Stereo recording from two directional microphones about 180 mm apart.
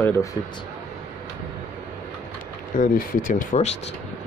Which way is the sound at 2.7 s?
50° left (ahead or behind).